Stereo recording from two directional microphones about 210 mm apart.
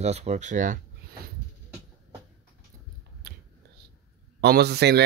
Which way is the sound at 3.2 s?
50° right (ahead or behind).